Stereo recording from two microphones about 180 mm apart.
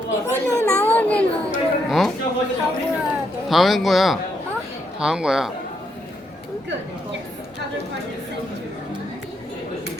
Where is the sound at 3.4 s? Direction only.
Centre (ahead or behind).